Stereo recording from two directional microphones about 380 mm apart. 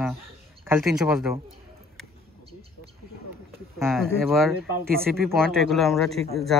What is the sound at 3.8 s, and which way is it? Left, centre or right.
Speech, centre.